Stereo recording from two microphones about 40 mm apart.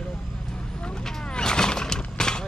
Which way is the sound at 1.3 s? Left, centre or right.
Centre.